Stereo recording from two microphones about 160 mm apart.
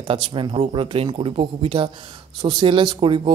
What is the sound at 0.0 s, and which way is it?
A man's voice, 30° right (ahead or behind).